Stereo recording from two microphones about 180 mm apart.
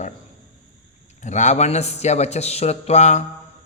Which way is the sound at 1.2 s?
40° left (ahead or behind).